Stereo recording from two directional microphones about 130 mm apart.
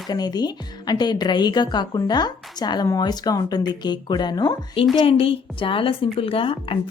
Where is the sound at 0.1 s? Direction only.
30° left (ahead or behind).